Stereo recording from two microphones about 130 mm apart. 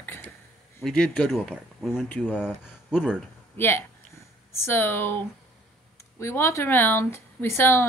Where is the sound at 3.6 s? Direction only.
15° left (ahead or behind).